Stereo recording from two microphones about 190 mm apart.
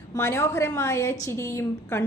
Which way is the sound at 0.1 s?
15° left (ahead or behind).